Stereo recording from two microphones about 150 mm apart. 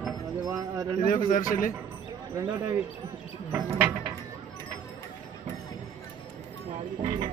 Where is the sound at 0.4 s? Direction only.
25° right (ahead or behind).